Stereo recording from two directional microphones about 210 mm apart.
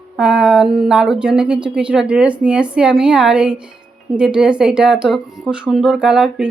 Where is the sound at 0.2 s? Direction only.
5° right (ahead or behind).